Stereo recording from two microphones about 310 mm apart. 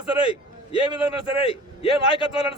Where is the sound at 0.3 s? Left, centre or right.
Centre.